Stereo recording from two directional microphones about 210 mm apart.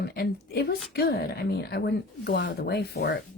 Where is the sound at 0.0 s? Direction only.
50° left (ahead or behind).